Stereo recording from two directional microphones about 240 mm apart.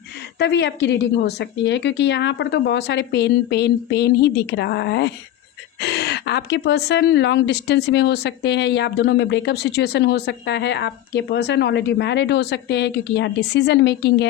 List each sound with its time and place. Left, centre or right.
0.3 s speech: left